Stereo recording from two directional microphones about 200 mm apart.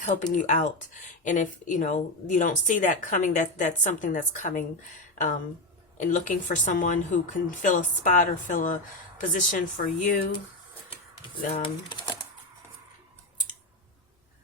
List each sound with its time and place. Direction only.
0.3 s speech: 40° left (ahead or behind)
11.5 s speech: 25° left (ahead or behind)